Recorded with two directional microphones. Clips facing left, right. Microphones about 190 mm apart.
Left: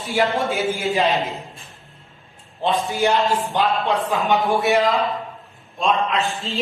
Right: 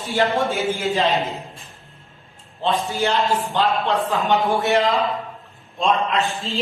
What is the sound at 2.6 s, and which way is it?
A man's voice, 15° left (ahead or behind).